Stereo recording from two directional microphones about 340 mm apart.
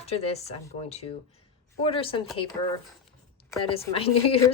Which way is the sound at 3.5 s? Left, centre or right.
Centre.